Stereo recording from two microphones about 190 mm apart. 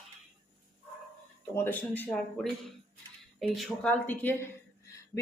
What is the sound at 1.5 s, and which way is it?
Speech, 10° left (ahead or behind).